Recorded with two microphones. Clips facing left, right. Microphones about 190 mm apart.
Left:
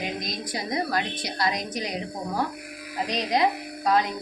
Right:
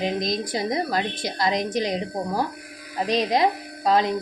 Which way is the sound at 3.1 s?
25° right (ahead or behind).